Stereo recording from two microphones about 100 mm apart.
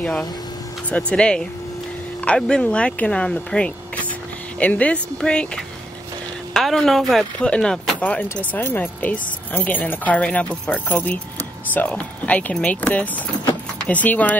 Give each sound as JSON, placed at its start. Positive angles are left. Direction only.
{"t": 0.0, "sound": "speech", "side_deg": 10}
{"t": 6.5, "sound": "a woman's voice", "side_deg": 5}